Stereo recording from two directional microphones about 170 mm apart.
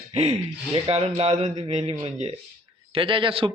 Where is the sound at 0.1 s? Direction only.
35° right (ahead or behind).